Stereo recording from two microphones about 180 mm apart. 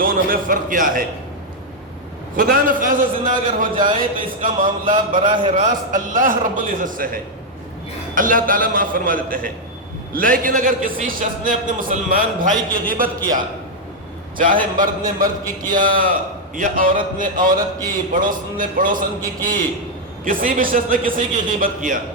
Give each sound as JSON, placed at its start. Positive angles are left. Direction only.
{"t": 0.0, "sound": "a man's voice", "side_deg": -50}
{"t": 2.3, "sound": "a man's voice", "side_deg": -50}